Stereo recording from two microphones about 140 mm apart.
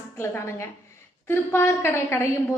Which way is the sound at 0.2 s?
20° left (ahead or behind).